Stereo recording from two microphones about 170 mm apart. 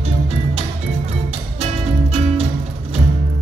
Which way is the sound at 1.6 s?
35° right (ahead or behind).